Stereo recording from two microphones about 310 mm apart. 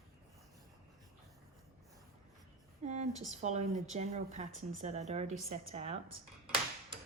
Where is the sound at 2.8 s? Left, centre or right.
Right.